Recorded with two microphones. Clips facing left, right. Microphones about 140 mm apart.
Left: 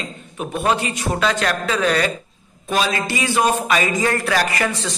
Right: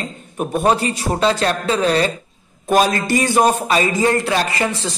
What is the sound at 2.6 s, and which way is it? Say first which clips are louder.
Speech: right 5 dB; 45° right (ahead or behind).